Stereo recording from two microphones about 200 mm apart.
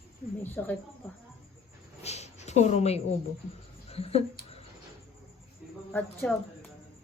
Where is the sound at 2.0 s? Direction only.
35° left (ahead or behind).